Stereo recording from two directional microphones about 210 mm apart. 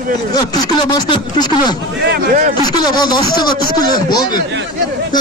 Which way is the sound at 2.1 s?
35° right (ahead or behind).